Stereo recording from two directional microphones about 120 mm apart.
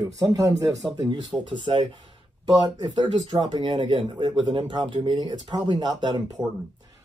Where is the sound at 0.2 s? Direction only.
30° right (ahead or behind).